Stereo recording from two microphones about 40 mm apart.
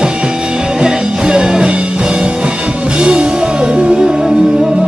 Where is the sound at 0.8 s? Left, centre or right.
Centre.